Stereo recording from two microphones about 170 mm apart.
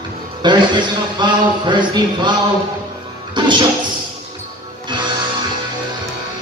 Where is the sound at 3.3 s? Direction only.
25° right (ahead or behind).